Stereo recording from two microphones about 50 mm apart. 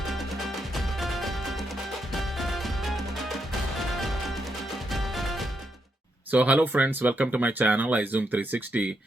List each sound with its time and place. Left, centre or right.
0.0 s music: centre
4.9 s music: centre
6.3 s speech: right